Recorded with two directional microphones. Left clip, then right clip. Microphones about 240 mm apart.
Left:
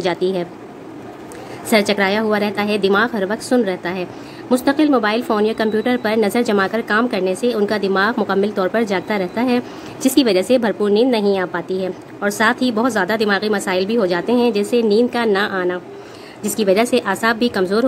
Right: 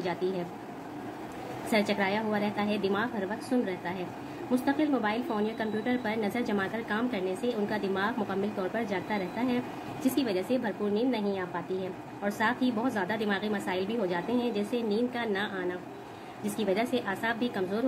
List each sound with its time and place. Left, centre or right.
0.0 s a woman's voice: left
1.7 s a woman's voice: left